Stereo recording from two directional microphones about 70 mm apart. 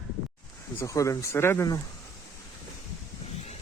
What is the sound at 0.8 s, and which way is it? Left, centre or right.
Speech, left.